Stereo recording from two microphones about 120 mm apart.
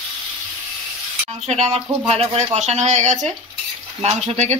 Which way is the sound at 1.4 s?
60° right (ahead or behind).